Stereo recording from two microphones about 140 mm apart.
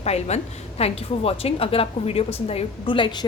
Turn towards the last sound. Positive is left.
turn(degrees=35)  # may be behind; listen again after turning